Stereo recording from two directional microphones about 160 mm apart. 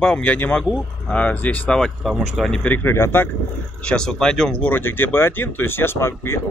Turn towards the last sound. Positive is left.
turn(degrees=15)  # may be behind; listen again after turning